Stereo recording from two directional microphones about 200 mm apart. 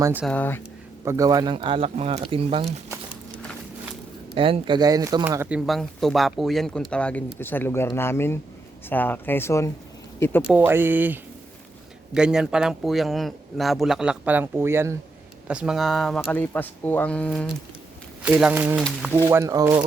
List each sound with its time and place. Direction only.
0.0 s speech: 10° right (ahead or behind)
0.3 s speech: 10° left (ahead or behind)
1.0 s speech: 15° right (ahead or behind)
4.4 s speech: 25° right (ahead or behind); by 10.4 s 10° left (ahead or behind)
10.4 s speech: 5° right (ahead or behind)
18.2 s speech: 5° right (ahead or behind)
19.3 s speech: 15° right (ahead or behind)